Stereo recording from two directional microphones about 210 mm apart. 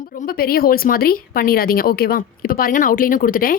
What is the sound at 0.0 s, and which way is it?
Speech, 40° left (ahead or behind).